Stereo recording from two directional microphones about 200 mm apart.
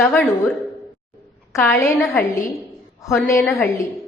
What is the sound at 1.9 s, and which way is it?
Speech, centre (ahead or behind).